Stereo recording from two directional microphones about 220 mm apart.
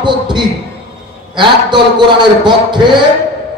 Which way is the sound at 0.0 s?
20° right (ahead or behind).